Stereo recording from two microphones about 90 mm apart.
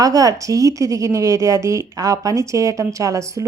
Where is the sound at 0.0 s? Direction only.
40° right (ahead or behind).